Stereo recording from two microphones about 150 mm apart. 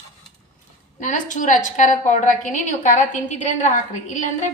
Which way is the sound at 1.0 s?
55° left (ahead or behind).